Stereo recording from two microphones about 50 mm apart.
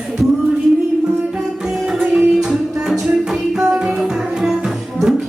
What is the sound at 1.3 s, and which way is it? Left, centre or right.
Music, centre.